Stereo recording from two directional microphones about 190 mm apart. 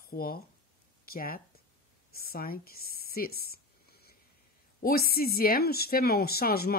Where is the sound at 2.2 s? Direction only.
50° left (ahead or behind).